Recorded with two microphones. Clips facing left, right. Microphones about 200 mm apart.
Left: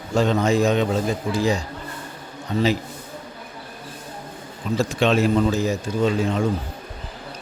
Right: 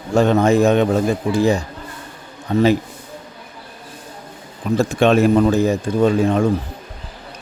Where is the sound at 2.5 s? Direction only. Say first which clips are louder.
Right 6 dB; 50° right (ahead or behind).